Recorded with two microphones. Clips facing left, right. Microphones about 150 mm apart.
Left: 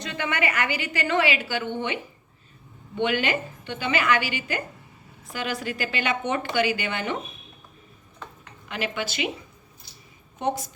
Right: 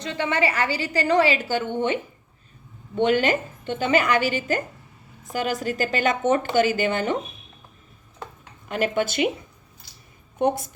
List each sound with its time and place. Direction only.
0.0 s a woman's voice: 30° right (ahead or behind)
2.9 s a woman's voice: 45° right (ahead or behind)
8.7 s a woman's voice: 45° right (ahead or behind)
10.3 s a woman's voice: 55° right (ahead or behind)